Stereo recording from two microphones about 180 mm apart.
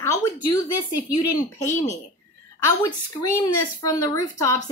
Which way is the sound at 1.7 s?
40° left (ahead or behind).